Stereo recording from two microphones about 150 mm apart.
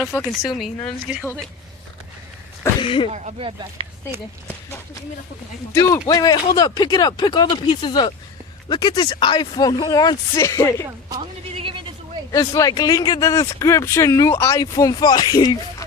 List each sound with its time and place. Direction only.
0.0 s a woman's voice: 10° left (ahead or behind)
0.4 s speech: centre (ahead or behind)
2.8 s speech: 35° left (ahead or behind)
3.1 s speech: 40° right (ahead or behind)
4.4 s speech: 15° left (ahead or behind)
11.5 s a sound: 35° right (ahead or behind)
12.3 s speech: 25° left (ahead or behind)